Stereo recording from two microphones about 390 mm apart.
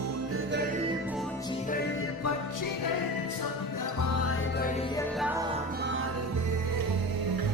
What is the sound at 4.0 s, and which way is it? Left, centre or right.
Music, left.